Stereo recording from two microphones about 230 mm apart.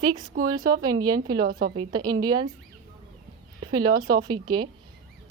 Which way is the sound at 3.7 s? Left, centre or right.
Centre.